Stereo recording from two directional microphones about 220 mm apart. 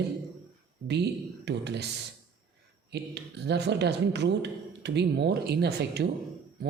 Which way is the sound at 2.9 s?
50° right (ahead or behind).